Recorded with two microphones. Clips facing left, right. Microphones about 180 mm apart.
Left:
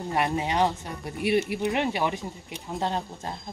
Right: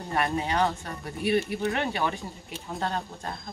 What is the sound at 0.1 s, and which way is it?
Speech, 20° left (ahead or behind).